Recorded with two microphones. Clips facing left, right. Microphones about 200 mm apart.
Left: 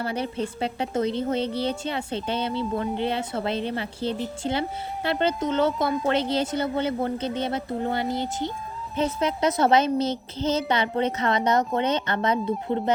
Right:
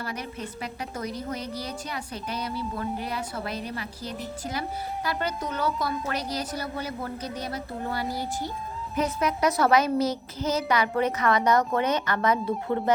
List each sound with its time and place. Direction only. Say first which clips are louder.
0.0 s a woman's voice: left 7 dB; 30° left (ahead or behind)